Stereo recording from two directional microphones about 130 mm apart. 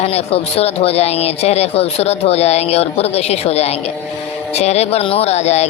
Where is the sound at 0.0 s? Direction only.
50° left (ahead or behind).